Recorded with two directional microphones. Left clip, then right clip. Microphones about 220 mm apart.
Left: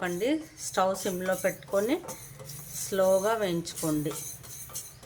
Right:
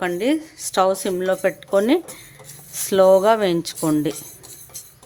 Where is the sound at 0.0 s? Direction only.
45° right (ahead or behind).